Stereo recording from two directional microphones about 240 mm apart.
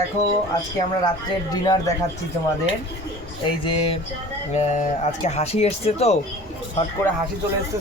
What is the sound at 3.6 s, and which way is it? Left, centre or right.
Speech, left.